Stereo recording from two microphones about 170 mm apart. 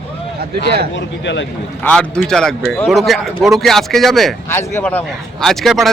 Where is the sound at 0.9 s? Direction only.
90° left.